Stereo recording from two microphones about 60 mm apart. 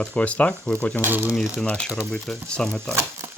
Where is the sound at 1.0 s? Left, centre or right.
Right.